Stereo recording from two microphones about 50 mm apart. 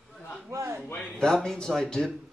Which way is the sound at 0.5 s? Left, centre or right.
Right.